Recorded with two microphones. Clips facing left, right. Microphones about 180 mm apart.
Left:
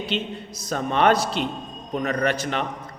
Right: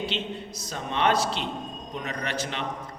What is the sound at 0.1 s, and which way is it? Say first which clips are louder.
A man's voice: left 4 dB; 45° left (ahead or behind).